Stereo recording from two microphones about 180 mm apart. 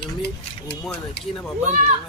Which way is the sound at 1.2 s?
75° left (ahead or behind).